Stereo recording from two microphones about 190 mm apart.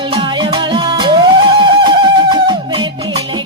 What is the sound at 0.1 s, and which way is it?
Music, 25° right (ahead or behind).